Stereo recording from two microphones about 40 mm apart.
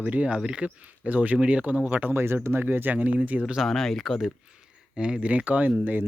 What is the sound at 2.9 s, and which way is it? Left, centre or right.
Speech, right.